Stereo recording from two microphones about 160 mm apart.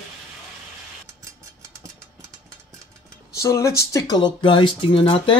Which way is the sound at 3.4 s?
20° left (ahead or behind).